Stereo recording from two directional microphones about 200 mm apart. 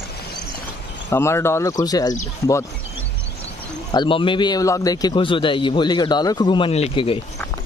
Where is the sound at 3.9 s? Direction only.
25° left (ahead or behind).